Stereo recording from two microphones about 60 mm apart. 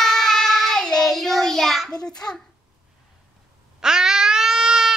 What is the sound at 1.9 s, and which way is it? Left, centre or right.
Speech, centre.